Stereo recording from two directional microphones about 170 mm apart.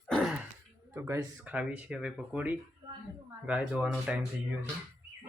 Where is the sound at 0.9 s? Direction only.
15° right (ahead or behind).